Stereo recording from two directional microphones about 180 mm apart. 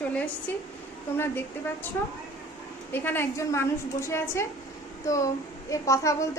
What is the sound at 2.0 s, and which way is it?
Speech, 15° left (ahead or behind).